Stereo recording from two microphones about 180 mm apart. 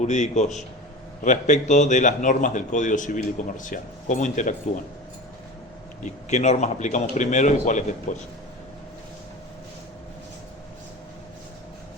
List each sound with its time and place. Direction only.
0.0 s a man's voice: 40° left (ahead or behind)
6.0 s a man's voice: 40° left (ahead or behind)